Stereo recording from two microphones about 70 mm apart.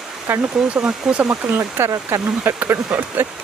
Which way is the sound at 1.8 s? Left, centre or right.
Right.